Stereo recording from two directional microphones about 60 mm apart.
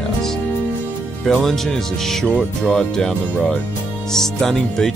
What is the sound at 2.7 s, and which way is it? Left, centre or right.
Speech, centre.